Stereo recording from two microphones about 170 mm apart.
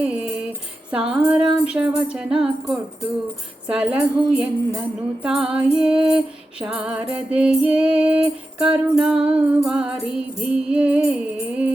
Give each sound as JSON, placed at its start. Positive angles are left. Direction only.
{"t": 0.0, "sound": "music", "side_deg": -5}